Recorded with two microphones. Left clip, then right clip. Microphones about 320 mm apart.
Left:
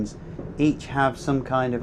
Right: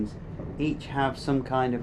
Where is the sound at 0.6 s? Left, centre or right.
Left.